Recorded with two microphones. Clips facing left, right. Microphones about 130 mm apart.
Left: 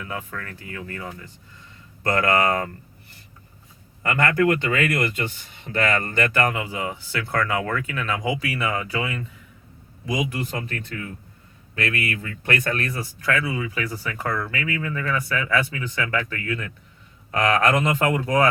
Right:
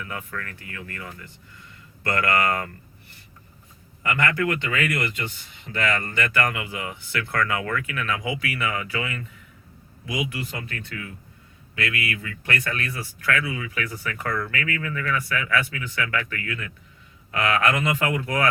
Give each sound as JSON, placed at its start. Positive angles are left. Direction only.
{"t": 0.0, "sound": "speech", "side_deg": 25}
{"t": 4.0, "sound": "speech", "side_deg": 40}